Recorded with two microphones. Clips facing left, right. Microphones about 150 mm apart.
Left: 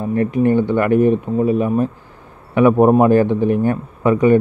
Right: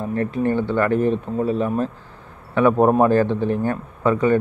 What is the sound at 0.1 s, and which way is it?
A man's voice, 15° left (ahead or behind).